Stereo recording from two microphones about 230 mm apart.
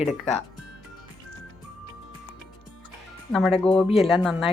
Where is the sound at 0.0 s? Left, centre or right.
Left.